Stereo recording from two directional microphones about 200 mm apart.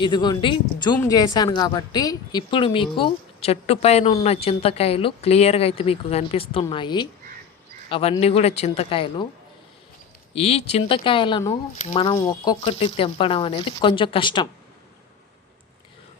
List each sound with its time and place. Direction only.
0.0 s a woman's voice: 20° left (ahead or behind)
10.3 s a woman's voice: 30° left (ahead or behind)